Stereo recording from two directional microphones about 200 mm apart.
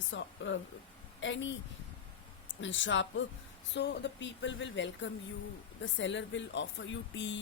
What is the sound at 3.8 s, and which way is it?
Speech, 60° left (ahead or behind).